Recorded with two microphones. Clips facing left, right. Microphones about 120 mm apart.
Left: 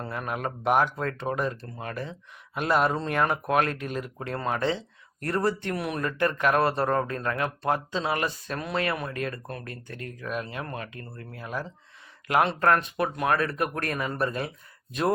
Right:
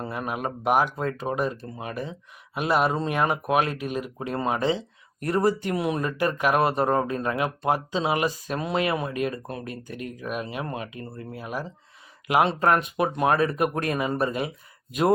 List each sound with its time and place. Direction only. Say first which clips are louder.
0.0 s speech: right 2 dB; 10° right (ahead or behind)